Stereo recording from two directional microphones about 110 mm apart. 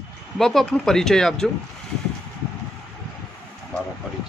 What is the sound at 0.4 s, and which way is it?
Speech, centre (ahead or behind).